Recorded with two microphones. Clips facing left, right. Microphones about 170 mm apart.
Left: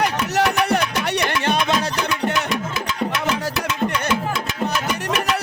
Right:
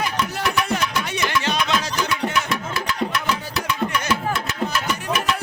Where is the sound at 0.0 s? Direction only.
70° left (ahead or behind).